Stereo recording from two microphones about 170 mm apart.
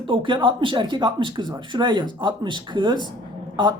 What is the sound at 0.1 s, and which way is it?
Speech, 30° right (ahead or behind).